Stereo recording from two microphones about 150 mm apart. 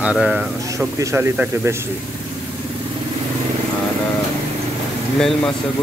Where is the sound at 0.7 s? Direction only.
20° right (ahead or behind).